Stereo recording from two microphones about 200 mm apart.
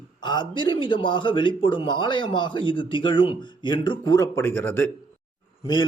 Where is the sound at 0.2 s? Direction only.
20° left (ahead or behind).